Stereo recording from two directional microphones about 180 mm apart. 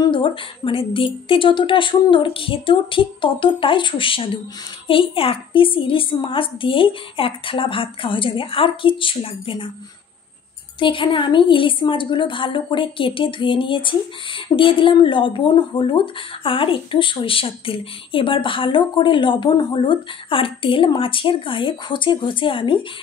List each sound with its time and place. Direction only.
0.0 s a woman's voice: 30° left (ahead or behind)
10.8 s a woman's voice: 30° left (ahead or behind)